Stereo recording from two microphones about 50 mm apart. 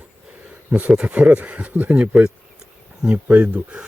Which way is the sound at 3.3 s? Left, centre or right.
Right.